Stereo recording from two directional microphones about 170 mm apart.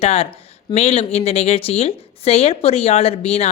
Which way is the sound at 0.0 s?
35° left (ahead or behind).